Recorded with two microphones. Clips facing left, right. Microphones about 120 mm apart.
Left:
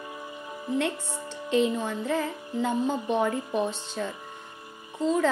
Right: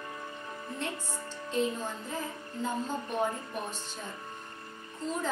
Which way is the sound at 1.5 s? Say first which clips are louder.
Left 7 dB; 75° left (ahead or behind).